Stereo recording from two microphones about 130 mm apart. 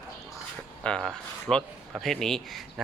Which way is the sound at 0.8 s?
5° left (ahead or behind).